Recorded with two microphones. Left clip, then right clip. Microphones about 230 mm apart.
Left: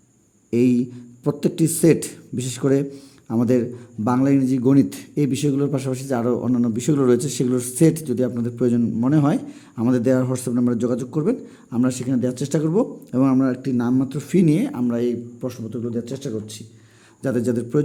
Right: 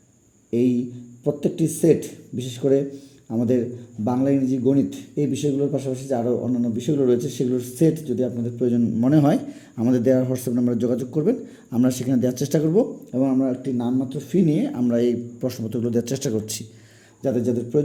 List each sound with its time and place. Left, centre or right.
0.5 s speech: left
8.8 s speech: centre
13.1 s speech: left; by 16.6 s centre
17.2 s speech: left